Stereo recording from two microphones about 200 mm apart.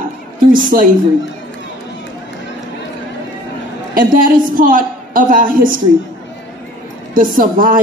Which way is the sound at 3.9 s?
45° right (ahead or behind).